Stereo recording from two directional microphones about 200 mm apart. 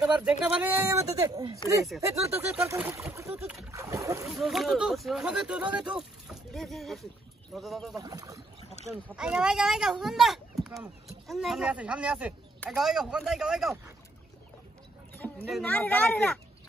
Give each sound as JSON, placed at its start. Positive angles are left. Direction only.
{"t": 0.0, "sound": "speech", "side_deg": -5}
{"t": 3.7, "sound": "splash", "side_deg": -15}
{"t": 4.3, "sound": "speech", "side_deg": 0}
{"t": 7.9, "sound": "speech", "side_deg": -20}
{"t": 9.1, "sound": "speech", "side_deg": -5}
{"t": 15.1, "sound": "vehicle", "side_deg": 10}
{"t": 15.5, "sound": "speech", "side_deg": 10}